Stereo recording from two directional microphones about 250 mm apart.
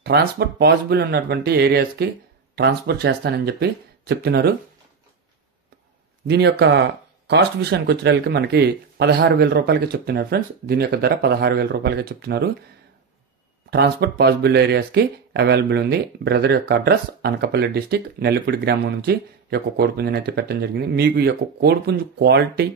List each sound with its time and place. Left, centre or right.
0.0 s speech: right
6.2 s speech: right
13.7 s speech: right